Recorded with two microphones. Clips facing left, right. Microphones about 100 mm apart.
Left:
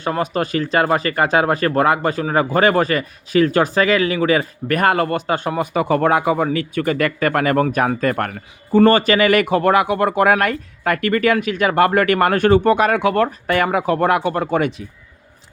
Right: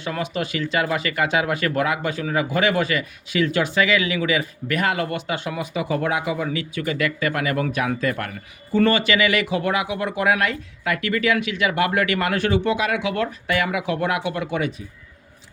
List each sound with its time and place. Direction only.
0.0 s speech: 45° left (ahead or behind)